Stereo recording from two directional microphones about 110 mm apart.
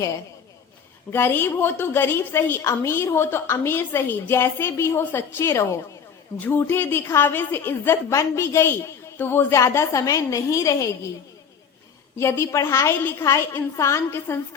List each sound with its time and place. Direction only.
1.1 s a woman's voice: 20° left (ahead or behind)
12.1 s a woman's voice: 25° left (ahead or behind)